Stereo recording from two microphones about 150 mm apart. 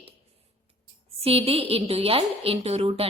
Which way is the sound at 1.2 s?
40° right (ahead or behind).